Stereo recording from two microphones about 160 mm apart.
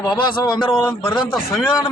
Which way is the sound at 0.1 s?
30° left (ahead or behind).